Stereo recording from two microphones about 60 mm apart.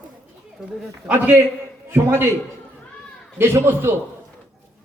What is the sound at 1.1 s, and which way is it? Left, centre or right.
A man's voice, right.